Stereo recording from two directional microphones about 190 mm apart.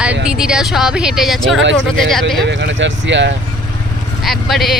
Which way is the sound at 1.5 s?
75° right (ahead or behind).